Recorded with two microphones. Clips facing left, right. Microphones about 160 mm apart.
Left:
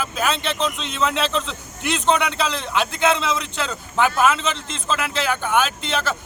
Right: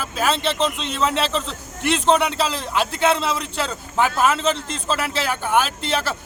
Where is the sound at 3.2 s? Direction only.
40° right (ahead or behind).